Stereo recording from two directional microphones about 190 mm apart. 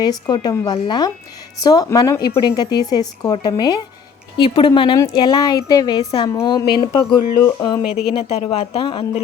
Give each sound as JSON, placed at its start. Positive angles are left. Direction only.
{"t": 0.0, "sound": "a woman's voice", "side_deg": 20}
{"t": 7.9, "sound": "speech", "side_deg": -5}
{"t": 8.1, "sound": "a woman's voice", "side_deg": 35}